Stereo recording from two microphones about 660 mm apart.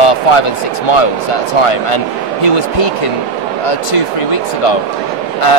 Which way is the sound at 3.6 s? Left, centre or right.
Left.